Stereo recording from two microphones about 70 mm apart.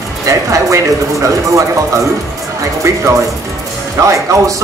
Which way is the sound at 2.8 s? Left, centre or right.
Right.